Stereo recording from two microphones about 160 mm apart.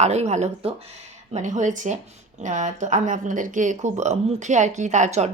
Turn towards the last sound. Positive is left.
turn(degrees=-45)  # may be behind; listen again after turning